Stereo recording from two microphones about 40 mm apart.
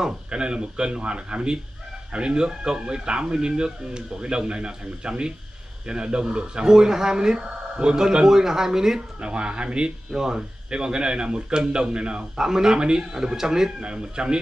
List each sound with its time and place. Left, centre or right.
0.0 s speech: right
9.2 s speech: right